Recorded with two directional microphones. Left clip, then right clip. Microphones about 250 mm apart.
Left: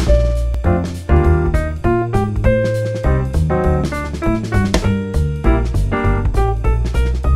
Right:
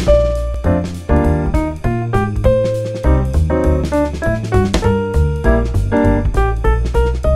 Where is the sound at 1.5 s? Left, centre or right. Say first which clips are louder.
Left 2 dB; centre.